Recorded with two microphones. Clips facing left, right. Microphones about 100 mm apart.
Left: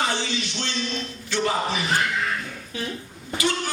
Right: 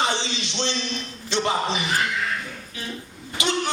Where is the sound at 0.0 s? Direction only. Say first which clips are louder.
Right 1 dB; 20° right (ahead or behind).